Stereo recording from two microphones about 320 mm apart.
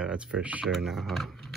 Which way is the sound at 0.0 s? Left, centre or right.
Centre.